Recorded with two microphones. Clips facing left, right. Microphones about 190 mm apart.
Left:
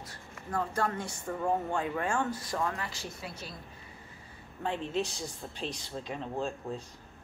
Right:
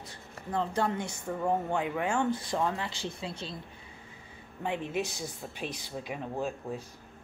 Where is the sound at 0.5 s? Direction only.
20° right (ahead or behind).